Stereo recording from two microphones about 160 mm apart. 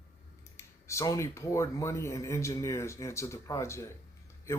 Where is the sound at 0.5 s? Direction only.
20° left (ahead or behind).